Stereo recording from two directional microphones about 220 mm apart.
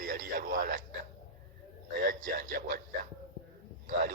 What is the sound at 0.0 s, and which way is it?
Speech, 40° right (ahead or behind).